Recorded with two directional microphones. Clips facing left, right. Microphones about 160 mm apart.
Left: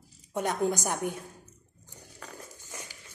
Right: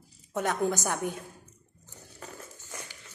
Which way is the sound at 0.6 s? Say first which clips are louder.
Even; 15° left (ahead or behind).